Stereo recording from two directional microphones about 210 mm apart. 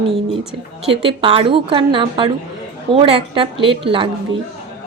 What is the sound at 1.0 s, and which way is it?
A woman's voice, 25° right (ahead or behind).